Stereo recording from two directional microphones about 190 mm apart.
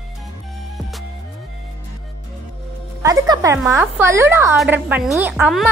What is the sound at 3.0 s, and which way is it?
A woman's voice, 15° right (ahead or behind).